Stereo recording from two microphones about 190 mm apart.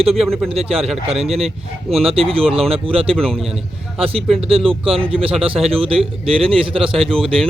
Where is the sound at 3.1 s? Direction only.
5° left (ahead or behind).